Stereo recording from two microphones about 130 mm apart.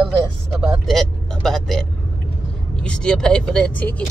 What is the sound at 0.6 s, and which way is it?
Vehicle, 5° left (ahead or behind).